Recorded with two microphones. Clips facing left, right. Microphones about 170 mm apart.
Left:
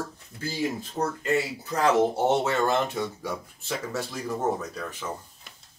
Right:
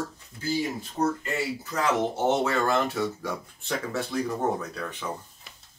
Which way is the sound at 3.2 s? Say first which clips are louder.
Even; 5° left (ahead or behind).